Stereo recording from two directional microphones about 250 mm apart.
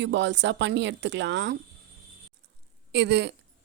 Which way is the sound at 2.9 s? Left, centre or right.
Right.